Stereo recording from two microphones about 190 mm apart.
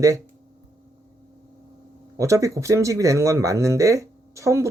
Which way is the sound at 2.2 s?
15° right (ahead or behind).